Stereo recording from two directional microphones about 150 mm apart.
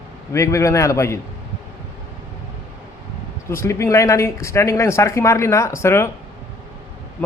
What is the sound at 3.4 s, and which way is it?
Speech, 20° left (ahead or behind).